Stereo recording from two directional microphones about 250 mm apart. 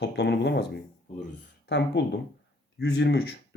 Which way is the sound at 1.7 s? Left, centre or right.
Left.